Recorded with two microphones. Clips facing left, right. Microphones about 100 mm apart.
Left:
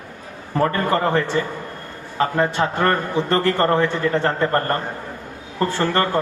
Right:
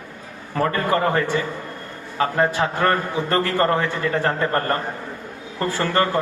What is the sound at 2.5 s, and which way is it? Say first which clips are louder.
A man's voice: left 1 dB; 30° left (ahead or behind).